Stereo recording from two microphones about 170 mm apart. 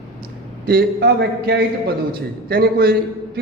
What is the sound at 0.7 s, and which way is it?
Speech, 65° right (ahead or behind).